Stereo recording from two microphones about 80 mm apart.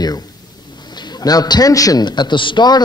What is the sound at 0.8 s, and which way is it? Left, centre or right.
A man's voice, left.